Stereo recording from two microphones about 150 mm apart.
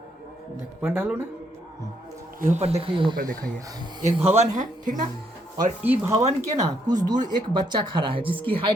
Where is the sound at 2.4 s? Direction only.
50° right (ahead or behind); by 3.2 s 35° right (ahead or behind).